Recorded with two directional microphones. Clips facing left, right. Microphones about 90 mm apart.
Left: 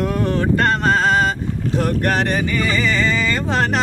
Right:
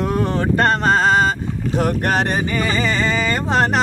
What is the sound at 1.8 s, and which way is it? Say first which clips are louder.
Speech: even; 20° right (ahead or behind).